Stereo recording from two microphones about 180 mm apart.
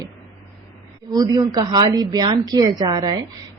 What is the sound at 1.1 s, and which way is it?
Speech, 20° right (ahead or behind).